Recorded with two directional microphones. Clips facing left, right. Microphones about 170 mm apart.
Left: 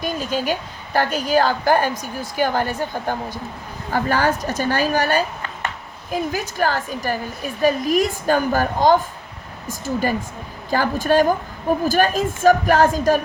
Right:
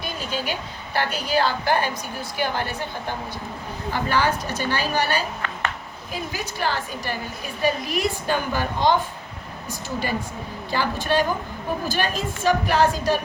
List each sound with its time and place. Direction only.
0.0 s a woman's voice: 45° left (ahead or behind)
6.3 s a woman's voice: 45° left (ahead or behind)